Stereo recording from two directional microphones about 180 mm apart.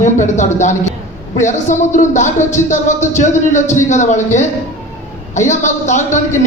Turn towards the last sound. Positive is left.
turn(degrees=40)  # may be behind; listen again after turning